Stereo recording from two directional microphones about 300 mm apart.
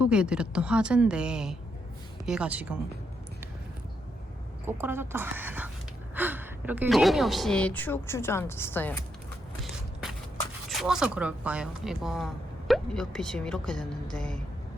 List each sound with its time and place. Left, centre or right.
0.0 s speech: centre
4.6 s a woman's voice: centre
10.7 s speech: centre